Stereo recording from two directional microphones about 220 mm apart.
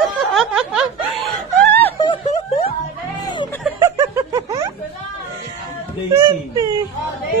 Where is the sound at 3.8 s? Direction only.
15° right (ahead or behind).